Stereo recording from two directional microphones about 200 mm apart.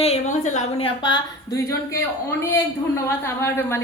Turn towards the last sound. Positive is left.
turn(degrees=10)  # may be behind; listen again after turning